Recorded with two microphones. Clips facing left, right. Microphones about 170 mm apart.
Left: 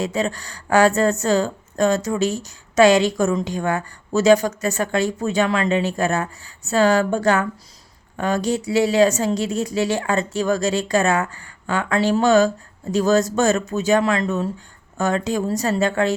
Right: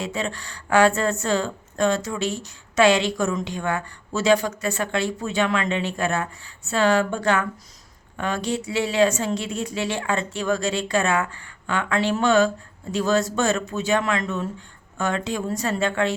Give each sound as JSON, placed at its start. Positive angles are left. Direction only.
{"t": 0.0, "sound": "a woman's voice", "side_deg": 40}